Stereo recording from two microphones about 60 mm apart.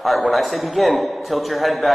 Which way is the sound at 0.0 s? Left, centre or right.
Centre.